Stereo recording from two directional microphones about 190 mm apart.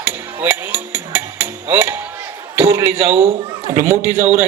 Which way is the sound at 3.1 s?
30° right (ahead or behind).